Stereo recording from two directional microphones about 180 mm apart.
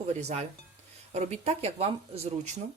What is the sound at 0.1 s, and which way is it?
Speech, 35° right (ahead or behind).